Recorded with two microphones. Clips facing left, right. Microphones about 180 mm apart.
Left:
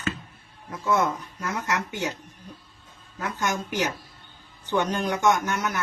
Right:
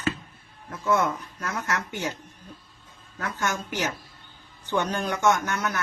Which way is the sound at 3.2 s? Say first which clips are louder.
Left 1 dB; 15° left (ahead or behind).